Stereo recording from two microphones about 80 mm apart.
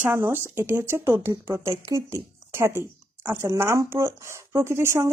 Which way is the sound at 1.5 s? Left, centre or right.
Right.